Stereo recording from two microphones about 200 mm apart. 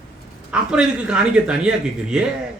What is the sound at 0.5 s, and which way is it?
Speech, 5° right (ahead or behind).